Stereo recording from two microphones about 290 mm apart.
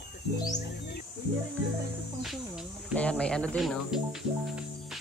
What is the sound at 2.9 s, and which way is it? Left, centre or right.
Speech, centre.